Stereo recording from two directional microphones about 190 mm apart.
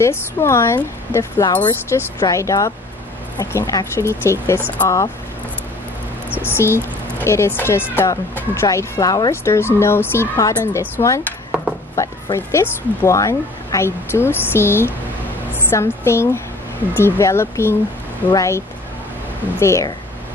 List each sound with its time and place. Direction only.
0.0 s speech: 15° left (ahead or behind)
6.4 s speech: 15° left (ahead or behind)
19.6 s speech: 15° left (ahead or behind)